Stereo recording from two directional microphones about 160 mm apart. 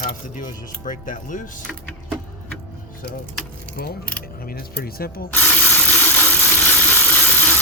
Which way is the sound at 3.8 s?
75° left (ahead or behind).